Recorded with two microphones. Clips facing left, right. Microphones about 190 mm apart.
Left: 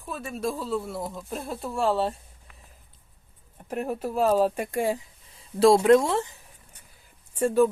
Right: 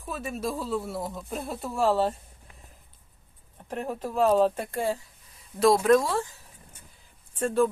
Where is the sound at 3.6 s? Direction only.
10° left (ahead or behind).